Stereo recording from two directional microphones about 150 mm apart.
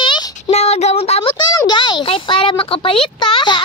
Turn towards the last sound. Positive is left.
turn(degrees=35)  # may be behind; listen again after turning